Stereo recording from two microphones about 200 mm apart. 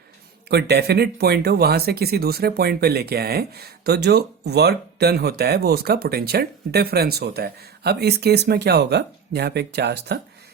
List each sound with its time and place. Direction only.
0.4 s speech: 55° right (ahead or behind)